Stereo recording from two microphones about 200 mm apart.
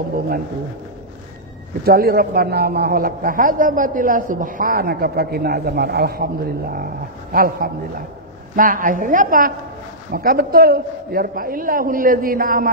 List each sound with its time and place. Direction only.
1.9 s a man's voice: 50° right (ahead or behind)